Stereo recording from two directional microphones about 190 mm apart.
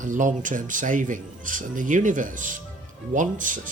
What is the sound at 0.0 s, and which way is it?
Speech, 40° right (ahead or behind).